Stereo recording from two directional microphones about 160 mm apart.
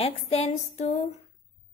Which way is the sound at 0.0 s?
40° left (ahead or behind).